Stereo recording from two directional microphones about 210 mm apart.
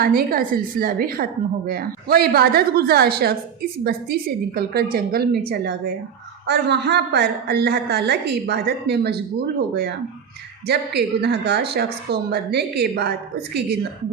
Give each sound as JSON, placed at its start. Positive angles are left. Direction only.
{"t": 0.0, "sound": "a woman's voice", "side_deg": -45}